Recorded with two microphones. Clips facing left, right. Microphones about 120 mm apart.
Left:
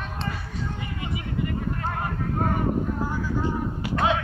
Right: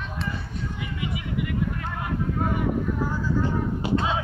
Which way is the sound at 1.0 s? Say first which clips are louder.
Even; 35° left (ahead or behind).